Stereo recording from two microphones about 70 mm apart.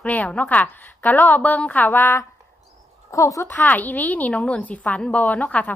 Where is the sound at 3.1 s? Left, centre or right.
Left.